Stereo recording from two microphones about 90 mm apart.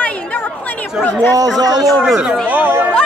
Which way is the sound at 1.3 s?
45° right (ahead or behind).